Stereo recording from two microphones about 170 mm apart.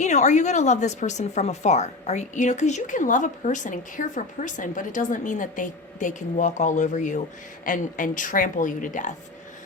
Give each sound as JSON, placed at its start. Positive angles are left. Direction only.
{"t": 0.0, "sound": "speech", "side_deg": 45}